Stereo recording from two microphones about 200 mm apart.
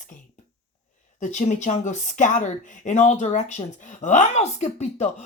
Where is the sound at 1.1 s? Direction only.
35° left (ahead or behind).